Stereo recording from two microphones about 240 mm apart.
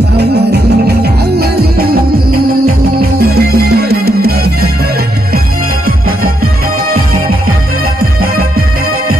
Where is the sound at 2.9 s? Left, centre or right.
Right.